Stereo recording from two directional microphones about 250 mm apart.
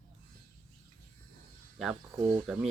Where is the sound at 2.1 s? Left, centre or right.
Centre.